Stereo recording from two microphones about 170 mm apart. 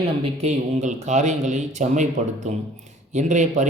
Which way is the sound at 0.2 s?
40° right (ahead or behind).